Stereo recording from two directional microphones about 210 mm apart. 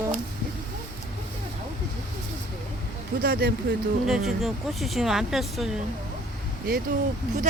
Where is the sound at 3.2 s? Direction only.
45° right (ahead or behind).